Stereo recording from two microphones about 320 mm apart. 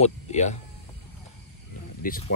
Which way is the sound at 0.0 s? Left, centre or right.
Left.